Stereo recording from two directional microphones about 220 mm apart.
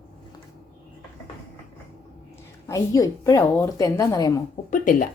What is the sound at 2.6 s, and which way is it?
A woman's voice, 15° left (ahead or behind).